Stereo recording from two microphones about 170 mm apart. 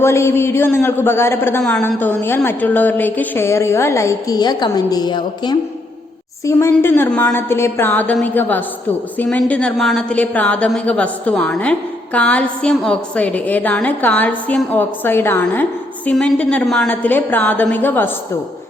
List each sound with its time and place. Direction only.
0.0 s a woman's voice: 15° left (ahead or behind)